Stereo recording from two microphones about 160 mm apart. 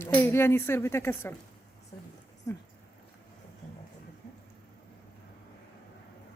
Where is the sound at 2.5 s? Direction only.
20° left (ahead or behind).